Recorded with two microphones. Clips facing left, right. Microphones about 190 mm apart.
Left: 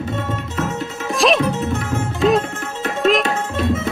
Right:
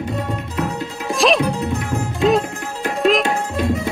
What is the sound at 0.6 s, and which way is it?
Music, centre (ahead or behind).